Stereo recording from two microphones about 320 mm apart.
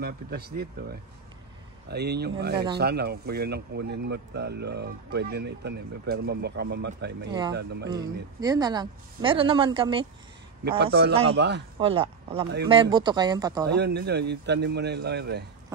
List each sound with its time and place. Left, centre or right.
0.0 s speech: right
7.9 s speech: centre
10.8 s speech: right
11.8 s speech: centre
13.7 s speech: right